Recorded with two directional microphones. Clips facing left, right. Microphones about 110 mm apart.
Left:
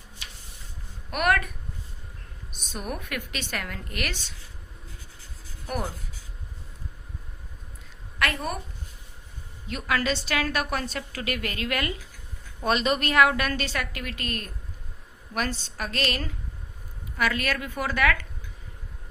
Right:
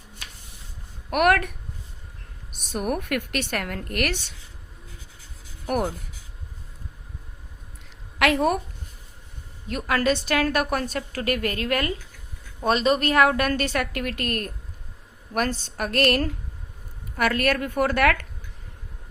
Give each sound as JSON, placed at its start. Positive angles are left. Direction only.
{"t": 1.1, "sound": "a woman's voice", "side_deg": -65}
{"t": 8.2, "sound": "a woman's voice", "side_deg": -90}
{"t": 9.6, "sound": "a woman's voice", "side_deg": -45}
{"t": 15.6, "sound": "a woman's voice", "side_deg": -60}